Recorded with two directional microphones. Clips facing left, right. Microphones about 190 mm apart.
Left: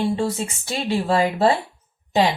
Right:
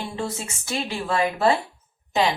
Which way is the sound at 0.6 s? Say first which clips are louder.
Left 5 dB; 30° left (ahead or behind).